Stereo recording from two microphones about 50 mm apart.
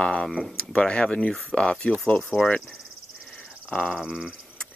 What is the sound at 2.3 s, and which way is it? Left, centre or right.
Speech, left.